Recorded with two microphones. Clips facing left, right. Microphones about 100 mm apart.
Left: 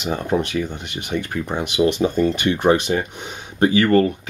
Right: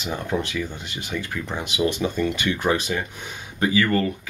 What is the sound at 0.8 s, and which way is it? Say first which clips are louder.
Speech: left 3 dB; 60° left (ahead or behind).